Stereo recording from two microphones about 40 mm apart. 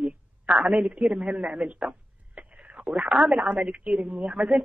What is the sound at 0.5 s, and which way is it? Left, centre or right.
A woman's voice, right.